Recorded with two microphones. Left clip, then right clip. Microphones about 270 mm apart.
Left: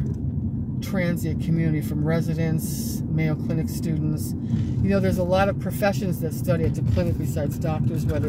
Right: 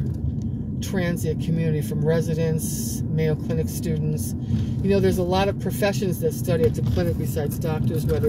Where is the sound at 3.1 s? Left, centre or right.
Left.